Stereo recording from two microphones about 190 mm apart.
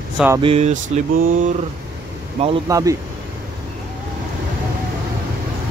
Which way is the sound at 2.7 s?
15° right (ahead or behind).